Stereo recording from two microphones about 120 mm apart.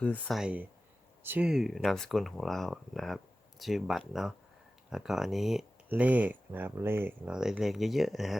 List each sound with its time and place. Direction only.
0.3 s speech: centre (ahead or behind)
1.2 s speech: 15° right (ahead or behind)
1.5 s speech: 5° right (ahead or behind)
5.9 s speech: 15° right (ahead or behind)
7.3 s speech: 5° right (ahead or behind)